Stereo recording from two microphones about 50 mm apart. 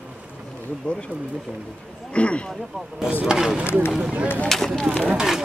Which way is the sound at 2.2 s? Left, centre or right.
Left.